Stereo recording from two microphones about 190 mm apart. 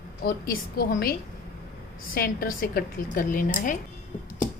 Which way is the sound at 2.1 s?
50° left (ahead or behind).